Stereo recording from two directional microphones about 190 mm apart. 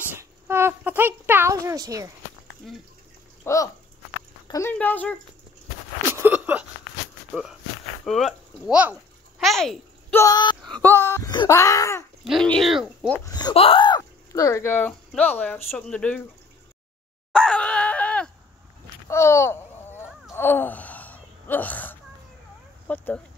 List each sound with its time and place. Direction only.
0.1 s speech: 15° right (ahead or behind)
3.4 s speech: 15° left (ahead or behind)
6.2 s a sound: 10° right (ahead or behind)
8.0 s speech: centre (ahead or behind)
10.1 s speech: 20° left (ahead or behind)
10.6 s speech: 5° left (ahead or behind)
12.3 s speech: centre (ahead or behind)
13.2 s speech: 20° left (ahead or behind)
17.3 s groan: 5° left (ahead or behind)
19.0 s a sound: 15° left (ahead or behind)
22.8 s speech: 10° left (ahead or behind)